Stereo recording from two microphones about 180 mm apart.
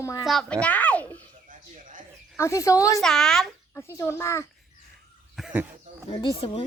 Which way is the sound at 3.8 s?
15° left (ahead or behind).